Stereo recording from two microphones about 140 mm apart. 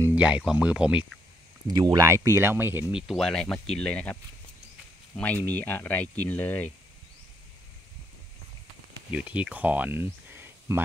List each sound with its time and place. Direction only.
0.1 s speech: 10° right (ahead or behind)
1.7 s speech: 30° right (ahead or behind); by 3.0 s 10° right (ahead or behind)
3.1 s speech: 5° left (ahead or behind)
9.1 s speech: 10° right (ahead or behind)